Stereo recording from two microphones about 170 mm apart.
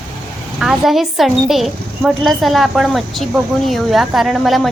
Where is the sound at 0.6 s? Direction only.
Centre (ahead or behind).